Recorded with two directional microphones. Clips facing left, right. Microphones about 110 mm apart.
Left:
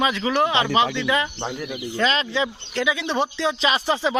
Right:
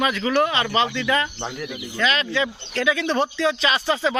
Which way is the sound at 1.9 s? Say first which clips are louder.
Even; 30° left (ahead or behind).